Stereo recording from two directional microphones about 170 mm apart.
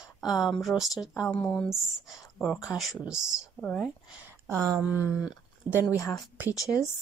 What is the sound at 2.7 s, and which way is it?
Speech, centre (ahead or behind).